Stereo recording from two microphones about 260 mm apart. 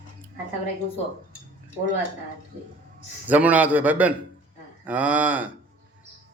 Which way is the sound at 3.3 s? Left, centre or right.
Centre.